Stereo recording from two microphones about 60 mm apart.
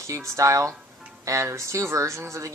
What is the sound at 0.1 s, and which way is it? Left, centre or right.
Speech, right.